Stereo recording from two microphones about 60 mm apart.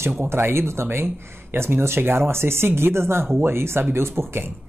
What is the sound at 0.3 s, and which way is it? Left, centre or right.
Speech, right.